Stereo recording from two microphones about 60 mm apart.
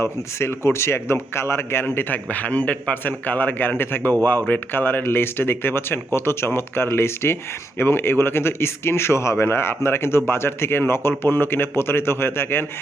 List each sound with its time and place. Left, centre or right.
0.0 s speech: left
1.8 s speech: left